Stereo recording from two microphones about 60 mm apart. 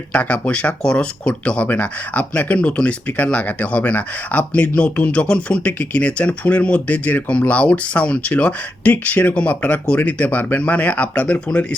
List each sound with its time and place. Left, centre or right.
0.1 s speech: left